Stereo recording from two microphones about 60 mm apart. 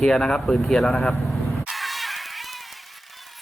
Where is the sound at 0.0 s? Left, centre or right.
Centre.